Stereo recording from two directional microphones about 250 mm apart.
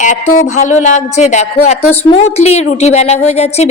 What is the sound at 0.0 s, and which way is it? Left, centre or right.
A woman's voice, left.